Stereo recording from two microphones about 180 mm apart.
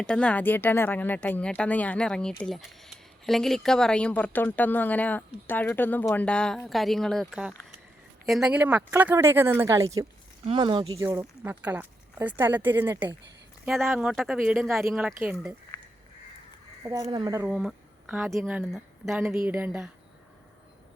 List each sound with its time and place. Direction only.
0.0 s speech: 5° left (ahead or behind); by 9.9 s 15° right (ahead or behind)
10.4 s speech: 30° right (ahead or behind)
11.0 s speech: 15° right (ahead or behind)
13.7 s speech: centre (ahead or behind)
16.8 s speech: 20° right (ahead or behind)
17.4 s speech: 5° right (ahead or behind)